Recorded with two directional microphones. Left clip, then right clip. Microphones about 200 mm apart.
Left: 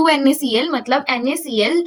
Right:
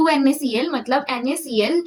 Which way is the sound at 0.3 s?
25° left (ahead or behind).